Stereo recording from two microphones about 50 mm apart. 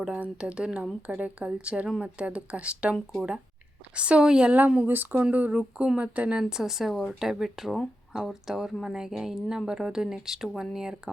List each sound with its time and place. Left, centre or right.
0.3 s speech: right
4.9 s speech: right
6.5 s speech: centre